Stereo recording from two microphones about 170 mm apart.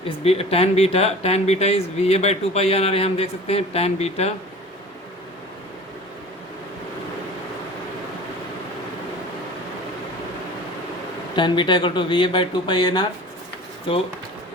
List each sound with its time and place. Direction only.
0.3 s speech: 35° left (ahead or behind)
11.3 s speech: 30° left (ahead or behind)